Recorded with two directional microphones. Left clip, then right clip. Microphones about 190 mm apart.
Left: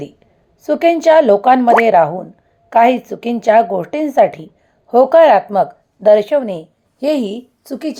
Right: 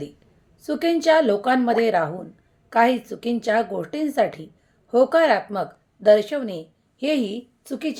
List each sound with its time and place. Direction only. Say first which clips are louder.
0.6 s a woman's voice: left 9 dB; 15° left (ahead or behind)
7.0 s a woman's voice: left 7 dB; 25° left (ahead or behind)